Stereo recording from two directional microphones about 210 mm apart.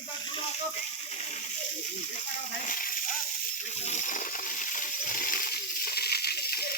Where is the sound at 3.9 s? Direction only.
35° left (ahead or behind).